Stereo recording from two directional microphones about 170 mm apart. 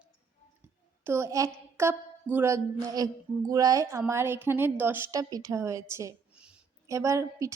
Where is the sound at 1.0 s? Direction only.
15° right (ahead or behind).